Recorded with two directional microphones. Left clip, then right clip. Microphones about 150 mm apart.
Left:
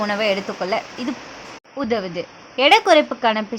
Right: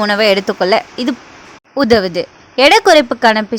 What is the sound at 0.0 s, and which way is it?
Speech, 45° right (ahead or behind).